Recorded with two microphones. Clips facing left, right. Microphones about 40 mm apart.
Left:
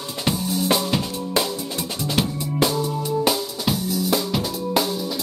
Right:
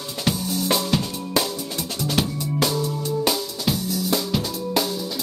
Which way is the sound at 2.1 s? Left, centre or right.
Centre.